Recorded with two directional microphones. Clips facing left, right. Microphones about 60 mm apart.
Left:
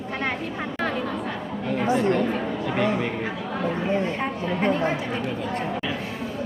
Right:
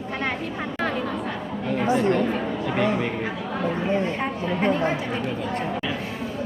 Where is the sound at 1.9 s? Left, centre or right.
Right.